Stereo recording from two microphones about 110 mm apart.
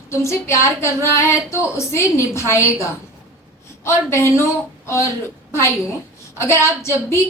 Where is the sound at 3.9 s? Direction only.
25° left (ahead or behind).